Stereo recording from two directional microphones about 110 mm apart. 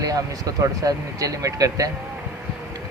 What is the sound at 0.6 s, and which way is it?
Speech, 30° right (ahead or behind).